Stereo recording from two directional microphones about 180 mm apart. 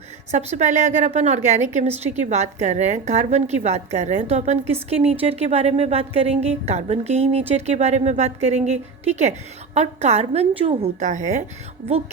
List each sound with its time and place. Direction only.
0.3 s a woman's voice: 40° right (ahead or behind)